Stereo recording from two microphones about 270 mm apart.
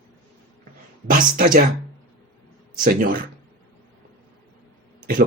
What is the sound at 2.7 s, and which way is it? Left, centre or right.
Speech, right.